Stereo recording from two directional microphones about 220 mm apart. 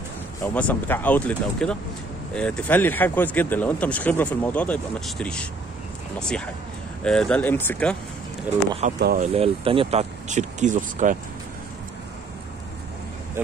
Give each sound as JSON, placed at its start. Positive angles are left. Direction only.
{"t": 0.4, "sound": "speech", "side_deg": 10}
{"t": 9.0, "sound": "speech", "side_deg": -40}
{"t": 9.3, "sound": "speech", "side_deg": -25}